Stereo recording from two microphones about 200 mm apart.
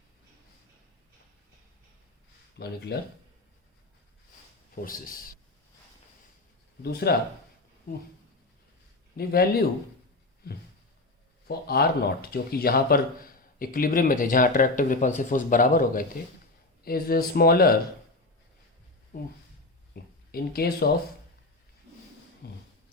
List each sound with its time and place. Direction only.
2.6 s speech: 55° left (ahead or behind)
4.7 s speech: 45° left (ahead or behind)
6.8 s speech: 50° left (ahead or behind)
9.1 s speech: 50° left (ahead or behind)
11.4 s speech: 50° left (ahead or behind)
19.1 s speech: 40° left (ahead or behind)
22.4 s speech: 55° left (ahead or behind)